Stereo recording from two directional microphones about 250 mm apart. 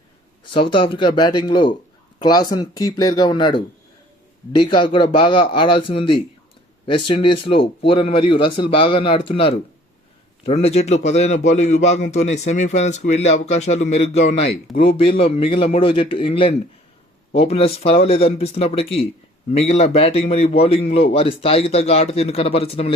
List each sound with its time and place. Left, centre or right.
0.5 s a man's voice: left